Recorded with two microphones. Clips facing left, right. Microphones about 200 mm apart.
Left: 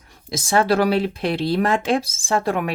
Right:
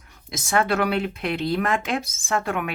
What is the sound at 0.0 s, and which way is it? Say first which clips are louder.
Speech: left 6 dB; 30° left (ahead or behind).